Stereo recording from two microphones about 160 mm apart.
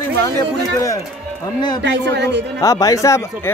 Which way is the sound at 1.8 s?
90° right.